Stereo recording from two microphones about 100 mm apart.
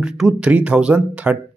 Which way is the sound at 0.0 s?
10° right (ahead or behind).